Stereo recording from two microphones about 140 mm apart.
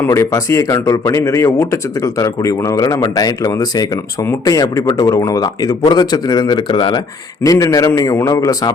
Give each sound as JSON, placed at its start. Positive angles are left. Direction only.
{"t": 0.0, "sound": "a man's voice", "side_deg": 20}